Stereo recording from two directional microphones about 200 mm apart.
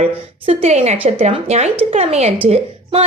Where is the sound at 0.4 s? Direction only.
30° right (ahead or behind).